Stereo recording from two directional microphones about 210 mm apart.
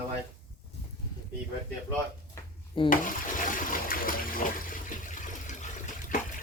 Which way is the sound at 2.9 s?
40° left (ahead or behind).